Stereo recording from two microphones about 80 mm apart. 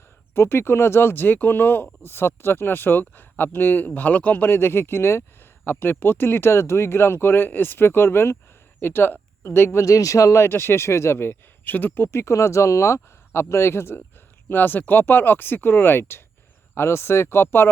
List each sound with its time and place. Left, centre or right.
0.3 s speech: left
12.2 s speech: left